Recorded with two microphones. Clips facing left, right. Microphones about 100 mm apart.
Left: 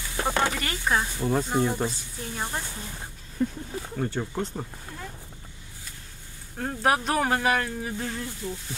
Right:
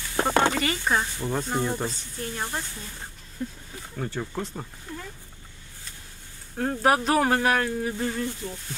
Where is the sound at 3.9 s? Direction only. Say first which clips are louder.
Left 1 dB; centre (ahead or behind).